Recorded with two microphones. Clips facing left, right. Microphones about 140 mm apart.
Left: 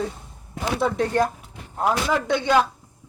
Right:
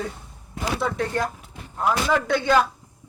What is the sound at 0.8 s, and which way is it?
Speech, 30° left (ahead or behind).